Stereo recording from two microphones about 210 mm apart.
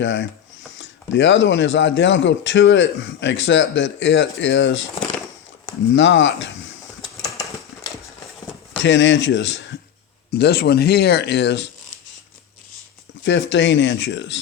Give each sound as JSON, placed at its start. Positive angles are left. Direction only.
{"t": 0.0, "sound": "a man's voice", "side_deg": 60}
{"t": 5.9, "sound": "a man's voice", "side_deg": 60}
{"t": 7.2, "sound": "a sound", "side_deg": 15}
{"t": 8.8, "sound": "a man's voice", "side_deg": 60}
{"t": 13.2, "sound": "a man's voice", "side_deg": 60}